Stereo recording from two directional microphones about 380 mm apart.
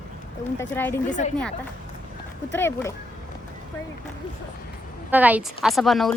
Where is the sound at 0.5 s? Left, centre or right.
Centre.